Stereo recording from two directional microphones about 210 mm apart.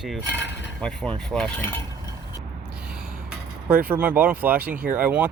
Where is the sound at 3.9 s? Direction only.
10° right (ahead or behind).